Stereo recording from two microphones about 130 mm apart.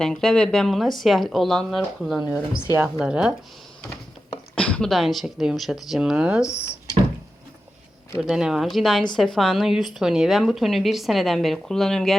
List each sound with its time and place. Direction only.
0.0 s a woman's voice: 5° left (ahead or behind)
4.5 s a woman's voice: 10° left (ahead or behind); by 6.5 s 10° right (ahead or behind)
6.5 s speech: 20° left (ahead or behind)
8.2 s a woman's voice: 5° right (ahead or behind)